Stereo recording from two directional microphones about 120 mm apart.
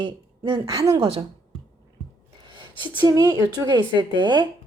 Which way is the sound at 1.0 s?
50° right (ahead or behind).